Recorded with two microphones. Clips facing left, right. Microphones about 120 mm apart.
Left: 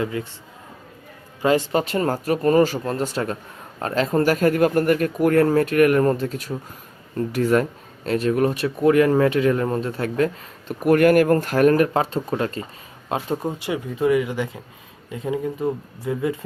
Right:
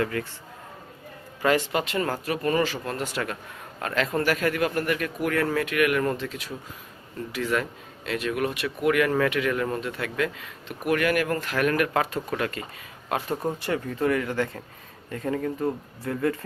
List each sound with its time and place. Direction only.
0.0 s a man's voice: 20° left (ahead or behind)
1.4 s speech: 30° left (ahead or behind)